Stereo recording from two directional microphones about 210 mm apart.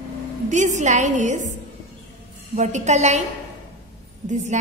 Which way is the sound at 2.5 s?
35° right (ahead or behind).